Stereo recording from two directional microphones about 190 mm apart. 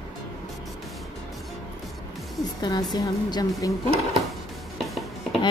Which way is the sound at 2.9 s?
20° left (ahead or behind).